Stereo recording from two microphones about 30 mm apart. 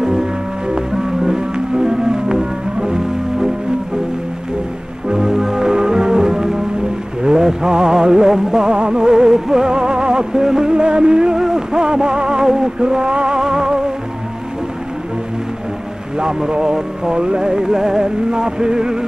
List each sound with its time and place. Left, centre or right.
0.0 s music: right
5.0 s music: right
8.7 s music: right
11.3 s a sound: centre
16.2 s music: right